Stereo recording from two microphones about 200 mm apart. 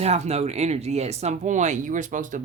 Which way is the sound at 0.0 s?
30° right (ahead or behind).